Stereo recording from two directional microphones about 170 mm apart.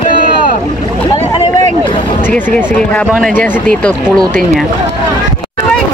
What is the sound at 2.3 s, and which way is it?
Speech, 5° left (ahead or behind).